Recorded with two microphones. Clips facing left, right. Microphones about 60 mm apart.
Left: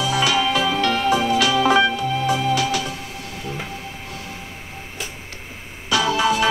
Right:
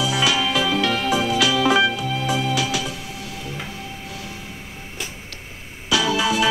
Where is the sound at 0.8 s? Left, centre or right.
Left.